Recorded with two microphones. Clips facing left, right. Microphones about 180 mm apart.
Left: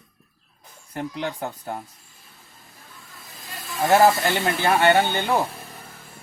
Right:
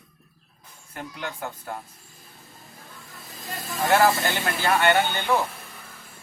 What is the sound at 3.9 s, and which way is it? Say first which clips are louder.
Speech: left 3 dB; 20° left (ahead or behind).